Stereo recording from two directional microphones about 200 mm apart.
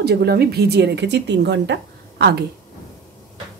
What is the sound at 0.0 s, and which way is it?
Speech, 55° right (ahead or behind).